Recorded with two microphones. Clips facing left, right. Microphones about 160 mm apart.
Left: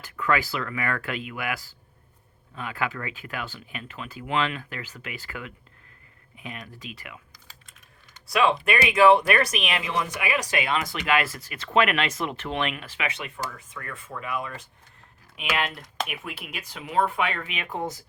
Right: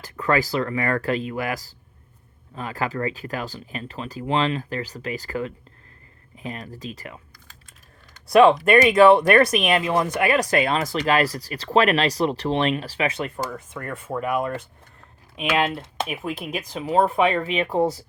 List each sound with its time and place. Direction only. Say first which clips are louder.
0.0 s speech: right 4 dB; 35° right (ahead or behind)
8.3 s speech: right 9 dB; 40° right (ahead or behind)
10.6 s speech: right 5 dB; 35° right (ahead or behind)
15.4 s speech: right 6 dB; 30° right (ahead or behind)